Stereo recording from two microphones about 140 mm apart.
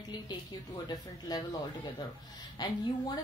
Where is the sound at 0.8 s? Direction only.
30° left (ahead or behind).